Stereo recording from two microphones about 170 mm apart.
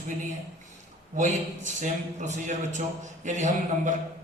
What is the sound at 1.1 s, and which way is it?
A man's voice, 45° right (ahead or behind).